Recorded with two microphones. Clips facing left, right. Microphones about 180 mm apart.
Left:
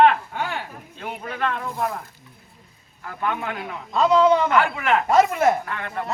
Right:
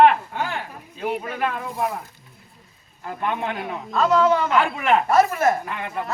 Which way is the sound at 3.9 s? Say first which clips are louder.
Left 2 dB; 15° left (ahead or behind).